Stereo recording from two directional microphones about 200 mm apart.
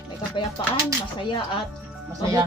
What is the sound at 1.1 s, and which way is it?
Speech, 25° left (ahead or behind).